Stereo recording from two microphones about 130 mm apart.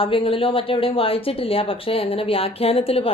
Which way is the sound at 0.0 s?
45° left (ahead or behind).